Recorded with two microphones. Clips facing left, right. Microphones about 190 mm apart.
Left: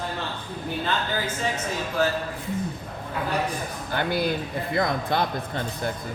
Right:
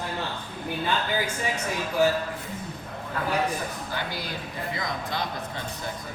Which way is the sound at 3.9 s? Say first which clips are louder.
Left 8 dB; 55° left (ahead or behind).